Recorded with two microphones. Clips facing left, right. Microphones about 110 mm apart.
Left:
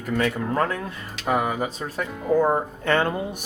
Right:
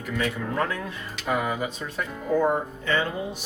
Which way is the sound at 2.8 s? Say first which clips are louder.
Left 4 dB; 60° left (ahead or behind).